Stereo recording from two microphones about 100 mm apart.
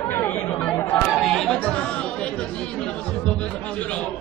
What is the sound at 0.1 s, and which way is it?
Chatter, 20° left (ahead or behind).